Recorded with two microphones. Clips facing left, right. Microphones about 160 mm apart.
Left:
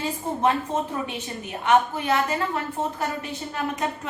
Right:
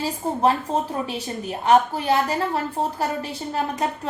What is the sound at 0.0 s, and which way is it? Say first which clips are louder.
A woman's voice: right 3 dB; 35° right (ahead or behind).